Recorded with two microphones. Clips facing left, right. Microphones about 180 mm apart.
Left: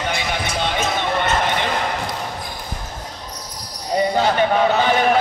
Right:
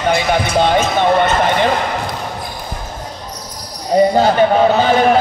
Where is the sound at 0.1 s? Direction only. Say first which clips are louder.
Right 9 dB; 40° right (ahead or behind).